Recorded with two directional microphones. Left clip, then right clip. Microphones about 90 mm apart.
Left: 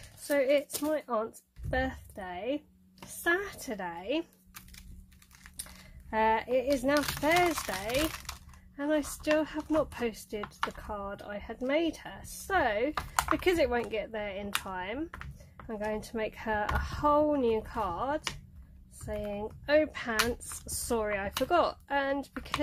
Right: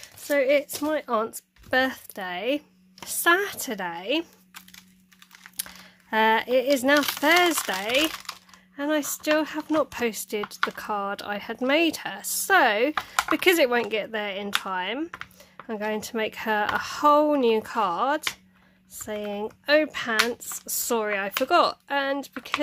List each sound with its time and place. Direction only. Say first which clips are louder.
0.3 s speech: right 5 dB; 20° right (ahead or behind)
0.8 s speech: right 6 dB; 40° right (ahead or behind)
3.3 s speech: right 9 dB; 40° right (ahead or behind)
7.2 s speech: right 7 dB; 45° right (ahead or behind)
7.5 s speech: right 8 dB; 30° right (ahead or behind)
8.1 s speech: right 6 dB; 20° right (ahead or behind)
9.9 s speech: right 7 dB; 35° right (ahead or behind)
10.8 s speech: right 10 dB; 65° right (ahead or behind)
13.3 s speech: right 8 dB; 45° right (ahead or behind)
15.0 s a sound: right 7 dB; 15° right (ahead or behind)
15.6 s speech: right 6 dB; 30° right (ahead or behind)
19.0 s speech: right 5 dB; 35° right (ahead or behind)
19.7 s speech: right 5 dB; 20° right (ahead or behind)
21.0 s speech: right 6 dB; 20° right (ahead or behind)